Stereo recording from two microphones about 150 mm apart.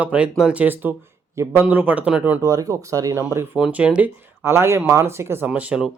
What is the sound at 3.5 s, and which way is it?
Speech, 5° right (ahead or behind).